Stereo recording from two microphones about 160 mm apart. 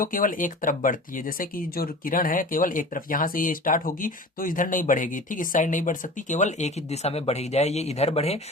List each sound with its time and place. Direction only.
0.0 s speech: 60° left (ahead or behind); by 8.4 s 40° left (ahead or behind)